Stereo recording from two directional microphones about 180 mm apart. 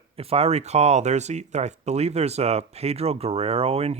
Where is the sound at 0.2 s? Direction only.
35° right (ahead or behind).